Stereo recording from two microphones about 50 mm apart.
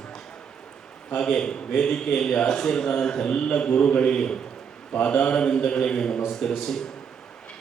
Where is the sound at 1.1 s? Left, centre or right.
Centre.